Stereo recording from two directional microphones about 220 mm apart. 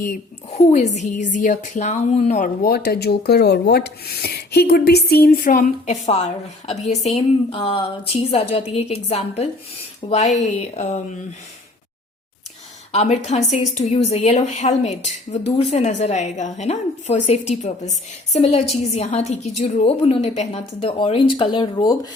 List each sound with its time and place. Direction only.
0.0 s a woman's voice: 35° left (ahead or behind)
12.9 s a woman's voice: 30° left (ahead or behind)